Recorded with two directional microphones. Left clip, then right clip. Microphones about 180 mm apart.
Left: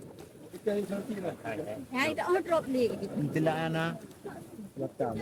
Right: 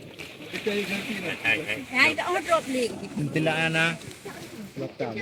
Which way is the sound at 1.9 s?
55° left (ahead or behind).